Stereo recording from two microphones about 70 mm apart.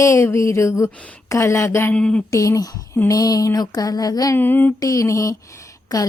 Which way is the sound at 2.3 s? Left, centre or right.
Left.